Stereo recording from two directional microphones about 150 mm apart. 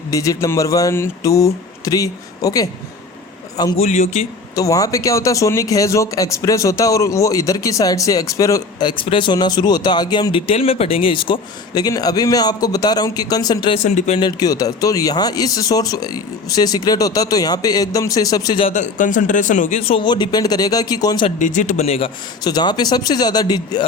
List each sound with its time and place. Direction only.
0.1 s speech: 20° left (ahead or behind)
3.8 s a man's voice: 50° left (ahead or behind)
4.5 s speech: 20° left (ahead or behind)
13.8 s a man's voice: 50° left (ahead or behind)
14.2 s speech: 25° left (ahead or behind)
18.7 s speech: 55° left (ahead or behind)
19.8 s speech: 35° left (ahead or behind)
21.3 s speech: 55° left (ahead or behind)
22.4 s speech: 30° left (ahead or behind)